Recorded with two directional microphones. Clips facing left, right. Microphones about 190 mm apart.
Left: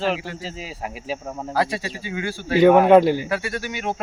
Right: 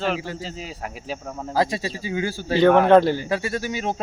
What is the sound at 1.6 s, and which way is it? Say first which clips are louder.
Speech: right 2 dB; 35° right (ahead or behind).